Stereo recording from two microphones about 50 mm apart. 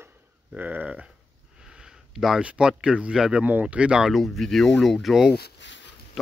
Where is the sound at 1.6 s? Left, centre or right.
Centre.